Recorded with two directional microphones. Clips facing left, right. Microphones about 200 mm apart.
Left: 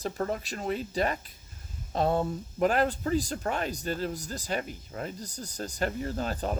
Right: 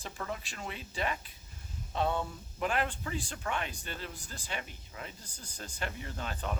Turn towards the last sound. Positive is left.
turn(degrees=40)  # may be behind; listen again after turning